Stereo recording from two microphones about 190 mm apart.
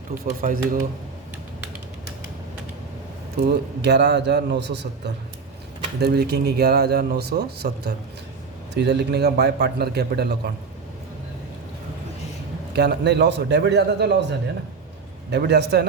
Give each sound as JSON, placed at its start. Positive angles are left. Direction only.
{"t": 0.3, "sound": "speech", "side_deg": -45}
{"t": 3.4, "sound": "speech", "side_deg": -60}
{"t": 12.7, "sound": "speech", "side_deg": -60}